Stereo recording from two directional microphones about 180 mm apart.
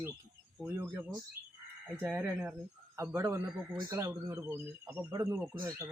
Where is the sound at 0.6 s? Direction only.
10° right (ahead or behind).